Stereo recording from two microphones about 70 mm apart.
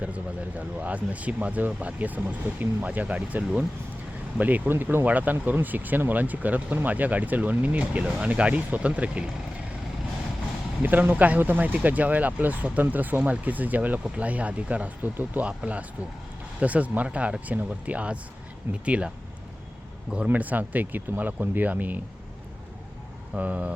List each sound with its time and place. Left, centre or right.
0.0 s speech: centre
10.8 s speech: right
20.2 s speech: right
23.3 s speech: centre